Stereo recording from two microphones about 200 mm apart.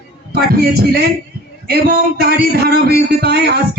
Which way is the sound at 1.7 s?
50° right (ahead or behind).